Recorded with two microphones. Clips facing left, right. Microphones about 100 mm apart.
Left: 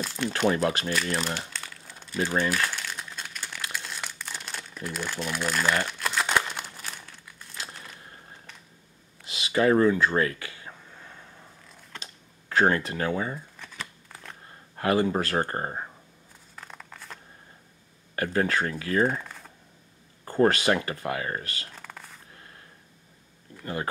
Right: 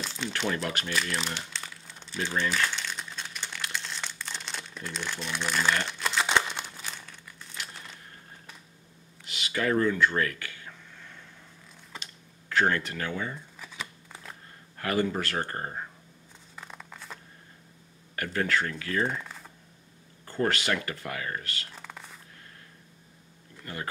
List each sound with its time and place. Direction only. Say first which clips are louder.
0.0 s crumpling: left 5 dB; 5° left (ahead or behind)
0.3 s speech: left 7 dB; 35° left (ahead or behind)
1.5 s crumpling: left 1 dB; centre (ahead or behind)
7.7 s a sound: left 1 dB; 5° left (ahead or behind)
9.3 s a sound: left 6 dB; 30° left (ahead or behind)
12.0 s computer keyboard: left 2 dB; 35° left (ahead or behind)
13.6 s shuffling cards: even; 5° right (ahead or behind)
14.8 s speech: left 4 dB; 25° left (ahead or behind)
16.5 s a sound: even; centre (ahead or behind)
18.1 s speech: left 3 dB; 30° left (ahead or behind)
19.0 s typing: left 5 dB; 5° left (ahead or behind)
20.2 s speech: left 6 dB; 35° left (ahead or behind)
21.7 s a sound: even; centre (ahead or behind)
23.6 s speech: left 6 dB; 30° left (ahead or behind)